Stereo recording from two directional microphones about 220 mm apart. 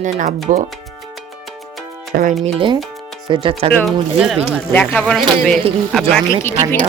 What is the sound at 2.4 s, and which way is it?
Speech, 25° right (ahead or behind).